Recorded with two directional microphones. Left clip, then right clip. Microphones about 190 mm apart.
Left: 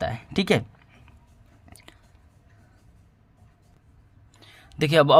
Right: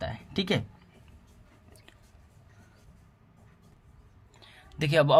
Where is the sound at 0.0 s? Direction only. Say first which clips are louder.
Left 6 dB; 40° left (ahead or behind).